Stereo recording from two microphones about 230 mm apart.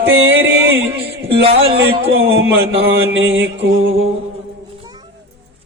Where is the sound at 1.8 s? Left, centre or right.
Right.